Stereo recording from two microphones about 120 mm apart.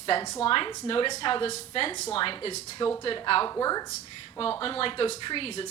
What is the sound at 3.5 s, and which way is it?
Speech, 30° left (ahead or behind).